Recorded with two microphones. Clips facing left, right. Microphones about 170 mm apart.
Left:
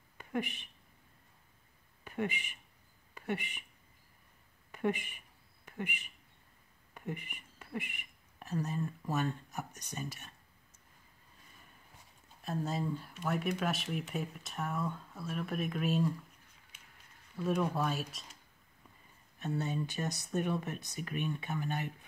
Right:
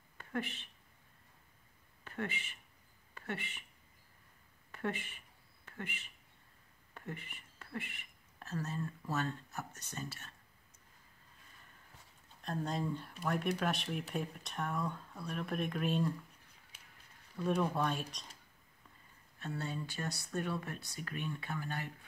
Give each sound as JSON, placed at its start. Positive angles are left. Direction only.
{"t": 0.2, "sound": "speech", "side_deg": 15}
{"t": 2.0, "sound": "speech", "side_deg": 15}
{"t": 4.7, "sound": "speech", "side_deg": 15}
{"t": 12.4, "sound": "speech", "side_deg": 5}
{"t": 17.4, "sound": "speech", "side_deg": 5}
{"t": 19.4, "sound": "speech", "side_deg": 20}